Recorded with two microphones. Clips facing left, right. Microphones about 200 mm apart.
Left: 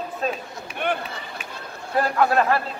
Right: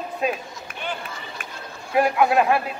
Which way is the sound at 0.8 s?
60° left (ahead or behind).